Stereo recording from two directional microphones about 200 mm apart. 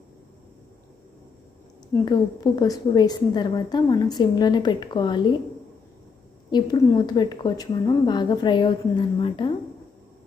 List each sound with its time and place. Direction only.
2.0 s a woman's voice: 20° left (ahead or behind)
6.5 s a woman's voice: 20° left (ahead or behind)